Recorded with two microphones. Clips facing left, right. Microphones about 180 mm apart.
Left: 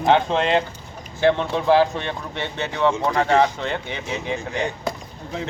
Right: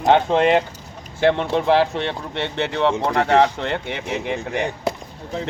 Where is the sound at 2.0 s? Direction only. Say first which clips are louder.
Right 3 dB; 70° right (ahead or behind).